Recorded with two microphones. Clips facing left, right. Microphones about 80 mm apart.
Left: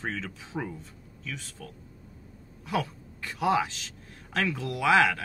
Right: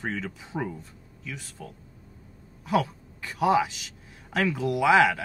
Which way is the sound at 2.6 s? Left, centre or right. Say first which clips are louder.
Right 5 dB; centre.